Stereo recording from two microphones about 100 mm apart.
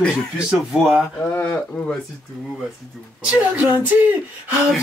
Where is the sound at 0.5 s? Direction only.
5° right (ahead or behind).